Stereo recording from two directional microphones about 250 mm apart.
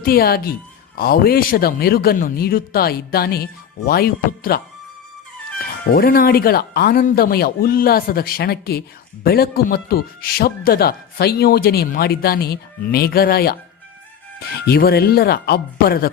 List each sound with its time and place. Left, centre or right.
0.0 s speech: left
5.9 s speech: left